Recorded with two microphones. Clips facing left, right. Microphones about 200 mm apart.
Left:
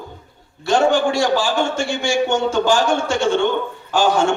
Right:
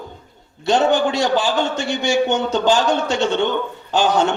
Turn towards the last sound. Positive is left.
turn(degrees=-20)  # may be behind; listen again after turning